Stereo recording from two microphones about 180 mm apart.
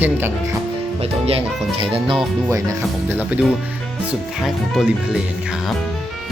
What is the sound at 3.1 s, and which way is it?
Speech, 10° right (ahead or behind).